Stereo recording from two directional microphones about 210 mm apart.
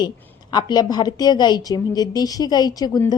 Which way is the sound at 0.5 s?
20° left (ahead or behind).